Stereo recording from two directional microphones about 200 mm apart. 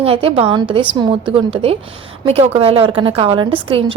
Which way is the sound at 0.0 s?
30° right (ahead or behind).